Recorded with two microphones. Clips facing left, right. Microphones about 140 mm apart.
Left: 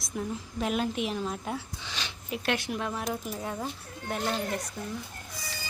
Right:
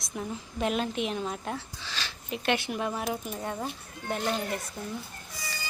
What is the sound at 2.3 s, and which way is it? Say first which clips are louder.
Speech: right 1 dB; centre (ahead or behind).